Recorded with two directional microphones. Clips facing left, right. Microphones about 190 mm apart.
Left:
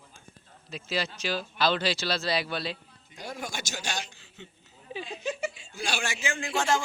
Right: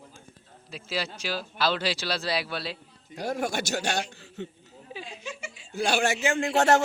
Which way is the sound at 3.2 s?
60° right (ahead or behind).